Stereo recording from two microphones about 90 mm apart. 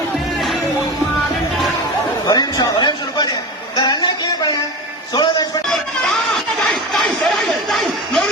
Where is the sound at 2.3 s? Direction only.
50° left (ahead or behind).